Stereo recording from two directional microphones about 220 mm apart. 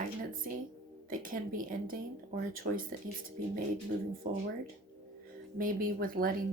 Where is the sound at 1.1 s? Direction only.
40° right (ahead or behind).